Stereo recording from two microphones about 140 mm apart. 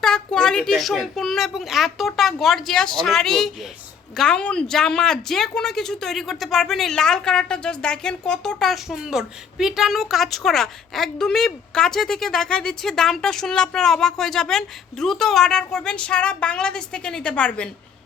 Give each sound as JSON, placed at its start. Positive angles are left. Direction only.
{"t": 0.0, "sound": "speech", "side_deg": 5}